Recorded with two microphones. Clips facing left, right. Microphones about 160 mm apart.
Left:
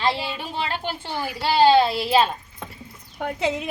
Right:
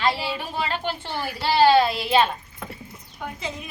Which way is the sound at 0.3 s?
15° left (ahead or behind).